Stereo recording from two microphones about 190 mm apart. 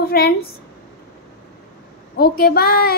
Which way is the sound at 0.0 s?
55° left (ahead or behind).